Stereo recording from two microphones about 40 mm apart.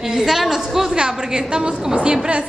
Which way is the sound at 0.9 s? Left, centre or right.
Right.